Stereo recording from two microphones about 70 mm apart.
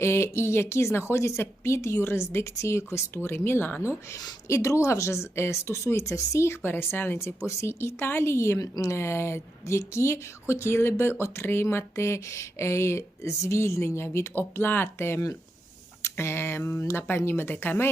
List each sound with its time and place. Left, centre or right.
0.0 s speech: left
4.4 s speech: left
8.5 s speech: left